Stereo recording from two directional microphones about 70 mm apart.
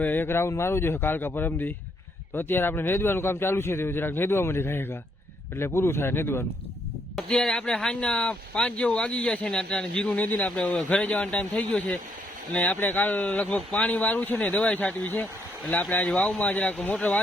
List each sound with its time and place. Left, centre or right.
0.0 s a man's voice: left
7.3 s speech: centre